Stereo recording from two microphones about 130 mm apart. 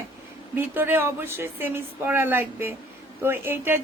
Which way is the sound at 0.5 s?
15° right (ahead or behind).